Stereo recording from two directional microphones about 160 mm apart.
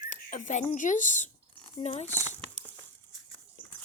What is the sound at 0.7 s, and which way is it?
Speech, 50° left (ahead or behind).